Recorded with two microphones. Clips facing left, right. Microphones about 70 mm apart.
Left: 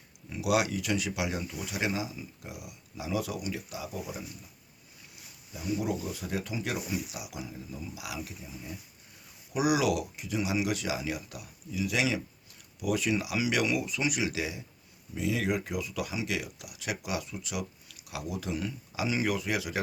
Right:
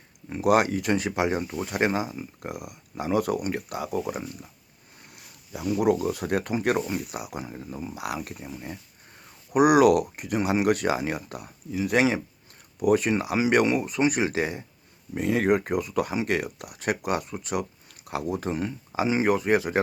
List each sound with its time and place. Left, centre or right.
0.3 s speech: right